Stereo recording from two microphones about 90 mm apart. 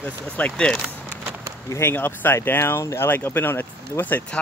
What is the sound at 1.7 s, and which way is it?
Speech, 25° left (ahead or behind).